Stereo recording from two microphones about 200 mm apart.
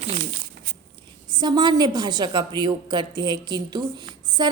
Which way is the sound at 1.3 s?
20° right (ahead or behind).